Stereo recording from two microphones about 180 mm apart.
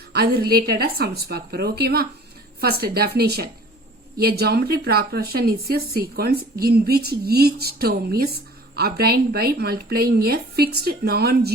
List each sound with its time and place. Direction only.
0.1 s speech: 60° right (ahead or behind)